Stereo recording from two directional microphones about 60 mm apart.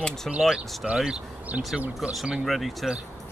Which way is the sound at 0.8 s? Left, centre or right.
Centre.